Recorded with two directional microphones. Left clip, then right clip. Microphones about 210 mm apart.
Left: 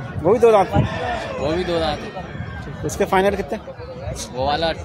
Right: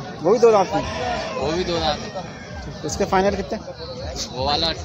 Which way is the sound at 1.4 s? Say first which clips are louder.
Left 2 dB; 50° left (ahead or behind).